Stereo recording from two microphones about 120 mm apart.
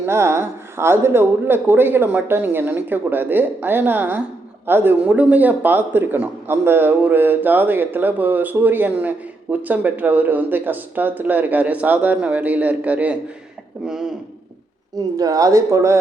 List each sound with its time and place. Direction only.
0.0 s speech: 20° right (ahead or behind); by 14.1 s 5° right (ahead or behind)
15.1 s speech: 30° right (ahead or behind)